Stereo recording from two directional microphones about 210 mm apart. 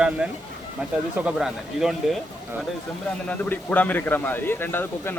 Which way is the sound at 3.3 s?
10° left (ahead or behind).